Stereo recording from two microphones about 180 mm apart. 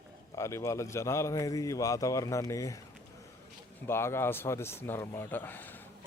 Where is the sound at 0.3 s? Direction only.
15° left (ahead or behind).